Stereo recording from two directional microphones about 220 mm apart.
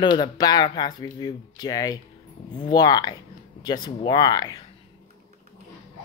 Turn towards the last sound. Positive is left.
turn(degrees=15)  # may be behind; listen again after turning